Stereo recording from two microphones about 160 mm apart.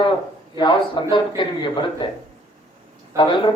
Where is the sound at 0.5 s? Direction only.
30° left (ahead or behind).